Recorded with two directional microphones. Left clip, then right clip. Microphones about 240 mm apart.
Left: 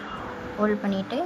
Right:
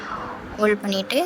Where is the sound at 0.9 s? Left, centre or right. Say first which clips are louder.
Right 6 dB; right.